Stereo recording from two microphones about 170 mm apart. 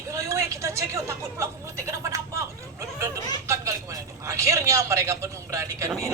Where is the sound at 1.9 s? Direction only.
15° right (ahead or behind).